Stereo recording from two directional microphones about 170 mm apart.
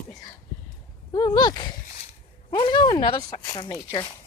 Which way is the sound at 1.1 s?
25° left (ahead or behind).